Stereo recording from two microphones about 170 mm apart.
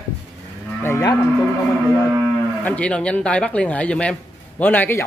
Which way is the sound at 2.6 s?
10° left (ahead or behind).